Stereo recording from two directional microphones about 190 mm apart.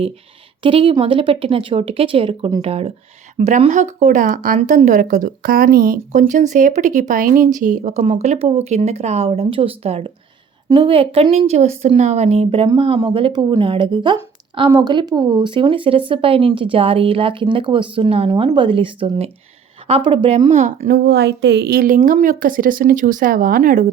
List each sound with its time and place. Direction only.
0.6 s speech: 30° right (ahead or behind)
20.8 s a woman's voice: 55° right (ahead or behind)